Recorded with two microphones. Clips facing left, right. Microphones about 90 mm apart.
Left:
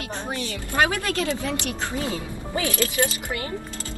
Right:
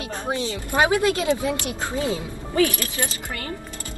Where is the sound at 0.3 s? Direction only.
20° right (ahead or behind).